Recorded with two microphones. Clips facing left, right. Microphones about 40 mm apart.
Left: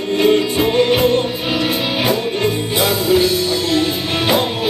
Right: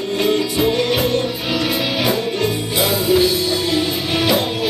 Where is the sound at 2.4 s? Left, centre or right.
Left.